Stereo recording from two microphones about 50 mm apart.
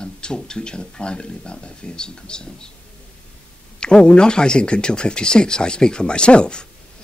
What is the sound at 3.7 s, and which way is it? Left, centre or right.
Speech, centre.